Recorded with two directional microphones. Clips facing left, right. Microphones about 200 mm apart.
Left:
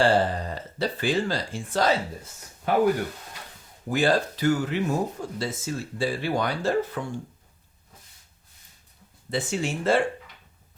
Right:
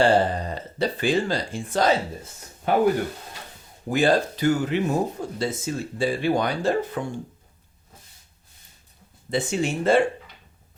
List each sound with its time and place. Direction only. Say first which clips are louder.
0.0 s speech: right 2 dB; 20° right (ahead or behind)
3.8 s speech: right 2 dB; 20° right (ahead or behind)
9.3 s speech: right 3 dB; 20° right (ahead or behind)